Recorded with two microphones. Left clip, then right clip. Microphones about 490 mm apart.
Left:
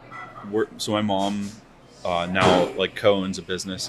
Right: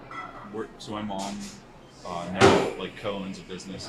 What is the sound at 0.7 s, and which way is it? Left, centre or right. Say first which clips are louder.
Speech: left 10 dB; left.